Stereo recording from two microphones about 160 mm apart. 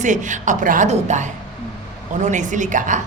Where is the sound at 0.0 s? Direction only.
50° right (ahead or behind).